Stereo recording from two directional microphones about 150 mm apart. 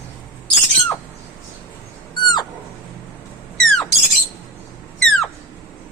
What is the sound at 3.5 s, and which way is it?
Bird, 5° left (ahead or behind).